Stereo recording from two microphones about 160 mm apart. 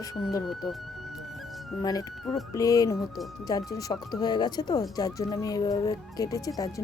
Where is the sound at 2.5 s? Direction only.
20° left (ahead or behind).